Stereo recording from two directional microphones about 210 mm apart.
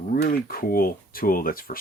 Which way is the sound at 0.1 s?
45° left (ahead or behind).